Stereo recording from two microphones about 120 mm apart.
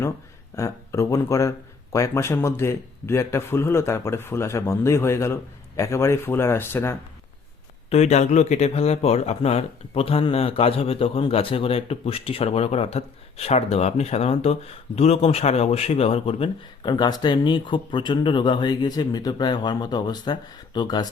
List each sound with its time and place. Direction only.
0.5 s speech: 25° left (ahead or behind)
7.9 s speech: 65° left (ahead or behind)
16.8 s speech: 40° left (ahead or behind)